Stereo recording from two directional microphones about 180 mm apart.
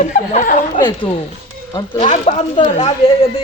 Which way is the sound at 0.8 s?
25° left (ahead or behind).